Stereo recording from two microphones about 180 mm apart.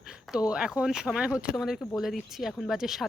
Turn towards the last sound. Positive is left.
turn(degrees=0)  # may be behind; listen again after turning